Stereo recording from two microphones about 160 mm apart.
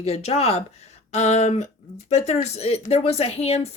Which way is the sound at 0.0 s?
40° left (ahead or behind).